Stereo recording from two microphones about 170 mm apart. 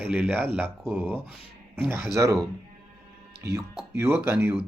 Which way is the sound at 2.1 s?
20° right (ahead or behind).